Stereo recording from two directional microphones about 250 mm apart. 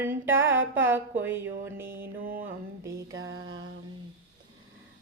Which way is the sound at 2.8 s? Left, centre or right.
Centre.